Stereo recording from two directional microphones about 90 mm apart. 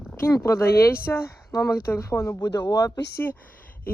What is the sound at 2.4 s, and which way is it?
Speech, 50° left (ahead or behind).